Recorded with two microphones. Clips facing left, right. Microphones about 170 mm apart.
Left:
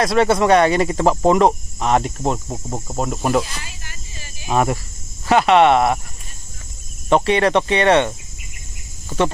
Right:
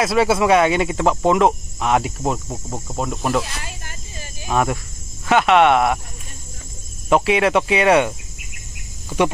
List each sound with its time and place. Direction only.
0.0 s speech: 5° right (ahead or behind)
2.3 s speech: 10° left (ahead or behind)
3.6 s a sound: 50° right (ahead or behind)
4.5 s speech: centre (ahead or behind)
7.1 s speech: 5° right (ahead or behind)